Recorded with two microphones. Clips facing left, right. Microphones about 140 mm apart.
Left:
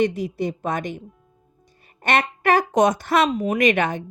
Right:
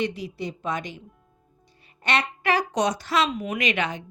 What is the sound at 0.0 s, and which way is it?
A woman's voice, 50° left (ahead or behind).